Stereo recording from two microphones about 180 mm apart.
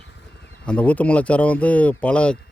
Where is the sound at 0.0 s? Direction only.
75° left (ahead or behind).